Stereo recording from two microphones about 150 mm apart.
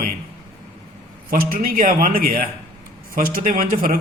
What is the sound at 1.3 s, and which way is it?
A man's voice, 75° right (ahead or behind).